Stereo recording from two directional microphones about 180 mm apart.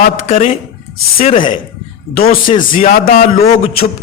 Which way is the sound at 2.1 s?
55° left (ahead or behind).